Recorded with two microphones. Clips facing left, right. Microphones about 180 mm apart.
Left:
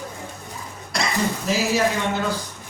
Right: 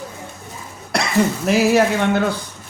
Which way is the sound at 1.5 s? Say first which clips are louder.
Right 6 dB; 60° right (ahead or behind).